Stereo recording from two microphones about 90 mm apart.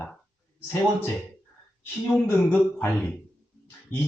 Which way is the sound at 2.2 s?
20° left (ahead or behind).